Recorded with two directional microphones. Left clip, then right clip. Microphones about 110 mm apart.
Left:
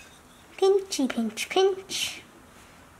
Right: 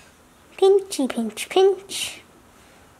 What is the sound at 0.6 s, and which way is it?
Speech, 25° right (ahead or behind).